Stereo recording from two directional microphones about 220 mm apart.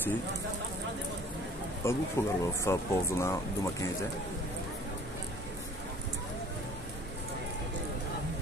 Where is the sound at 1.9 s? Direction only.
10° left (ahead or behind).